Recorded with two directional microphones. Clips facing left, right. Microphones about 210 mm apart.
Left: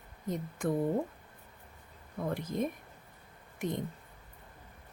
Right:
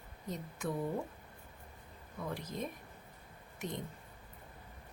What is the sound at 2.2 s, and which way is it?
Speech, 50° left (ahead or behind).